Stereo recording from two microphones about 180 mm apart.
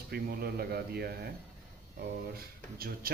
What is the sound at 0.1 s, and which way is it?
Speech, 60° right (ahead or behind).